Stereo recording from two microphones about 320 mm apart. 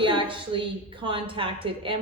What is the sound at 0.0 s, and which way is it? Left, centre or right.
A woman's voice, centre.